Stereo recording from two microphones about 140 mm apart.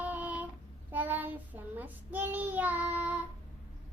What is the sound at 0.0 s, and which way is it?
Female singing, 10° right (ahead or behind).